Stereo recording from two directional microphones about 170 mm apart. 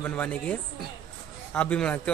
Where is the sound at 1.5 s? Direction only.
10° left (ahead or behind).